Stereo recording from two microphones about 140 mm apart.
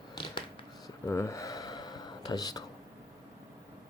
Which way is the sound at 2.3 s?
25° left (ahead or behind).